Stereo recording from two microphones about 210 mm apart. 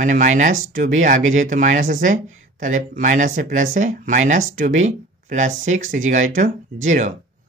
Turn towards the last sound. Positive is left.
turn(degrees=-35)  # may be behind; listen again after turning